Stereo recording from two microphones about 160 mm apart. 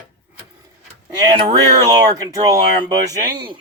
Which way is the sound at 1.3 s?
25° right (ahead or behind).